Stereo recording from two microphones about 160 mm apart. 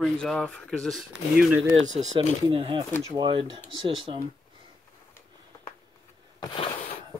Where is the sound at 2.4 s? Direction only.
35° right (ahead or behind).